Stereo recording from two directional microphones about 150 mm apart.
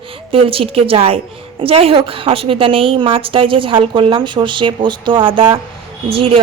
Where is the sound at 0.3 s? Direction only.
35° right (ahead or behind).